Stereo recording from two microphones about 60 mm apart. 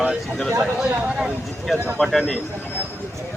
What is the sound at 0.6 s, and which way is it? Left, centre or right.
Speech, centre.